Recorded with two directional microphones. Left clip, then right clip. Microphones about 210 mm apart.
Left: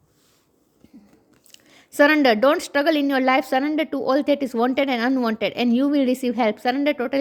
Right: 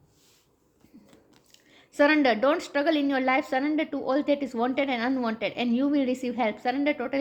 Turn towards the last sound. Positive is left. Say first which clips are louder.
# left 5 dB
turn(degrees=45)  # may be behind; listen again after turning